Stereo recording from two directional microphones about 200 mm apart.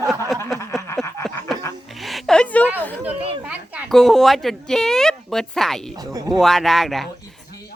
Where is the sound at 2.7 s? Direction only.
10° left (ahead or behind).